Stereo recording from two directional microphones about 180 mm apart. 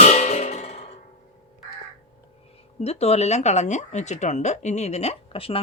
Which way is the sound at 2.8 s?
35° left (ahead or behind).